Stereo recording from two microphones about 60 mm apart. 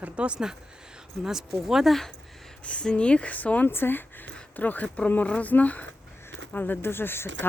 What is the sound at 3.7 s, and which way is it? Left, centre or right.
Speech, left.